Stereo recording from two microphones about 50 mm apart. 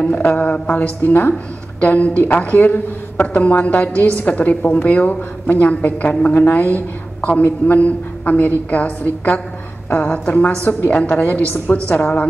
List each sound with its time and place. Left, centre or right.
0.0 s a woman's voice: left
1.8 s a woman's voice: left
7.2 s a woman's voice: left
7.4 s a woman's voice: left